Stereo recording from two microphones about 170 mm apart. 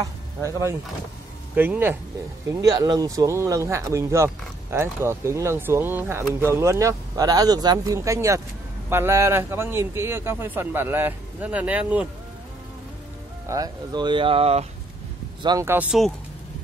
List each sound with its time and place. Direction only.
0.0 s speech: 20° right (ahead or behind)
13.5 s speech: 25° right (ahead or behind)
15.4 s speech: 20° right (ahead or behind)